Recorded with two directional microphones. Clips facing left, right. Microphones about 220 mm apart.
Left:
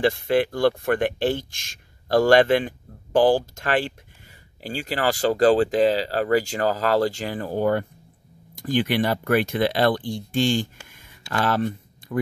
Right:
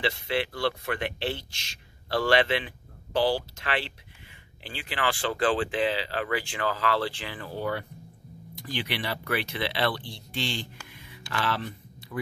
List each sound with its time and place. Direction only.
0.0 s a man's voice: 50° left (ahead or behind)
10.9 s a sound: 45° left (ahead or behind)
11.3 s speech: 45° left (ahead or behind)